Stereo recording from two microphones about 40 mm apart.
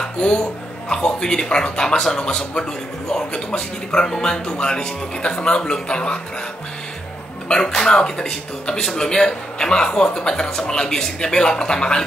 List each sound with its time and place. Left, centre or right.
0.0 s a sound: left
0.9 s speech: centre
7.4 s speech: centre